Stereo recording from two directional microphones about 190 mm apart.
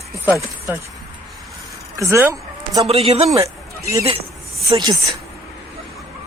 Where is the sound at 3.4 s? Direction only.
15° right (ahead or behind).